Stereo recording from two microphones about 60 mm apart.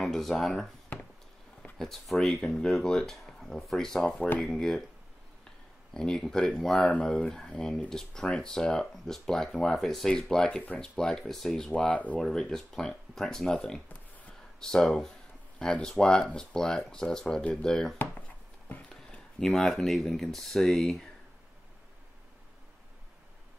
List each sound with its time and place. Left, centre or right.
0.0 s speech: centre
1.8 s speech: centre
5.9 s speech: centre; by 12.2 s left
12.2 s speech: centre
15.6 s speech: centre
17.4 s speech: left
17.6 s speech: centre
19.0 s speech: centre